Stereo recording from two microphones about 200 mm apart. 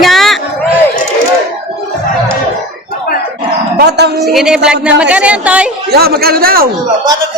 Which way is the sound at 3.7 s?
55° right (ahead or behind).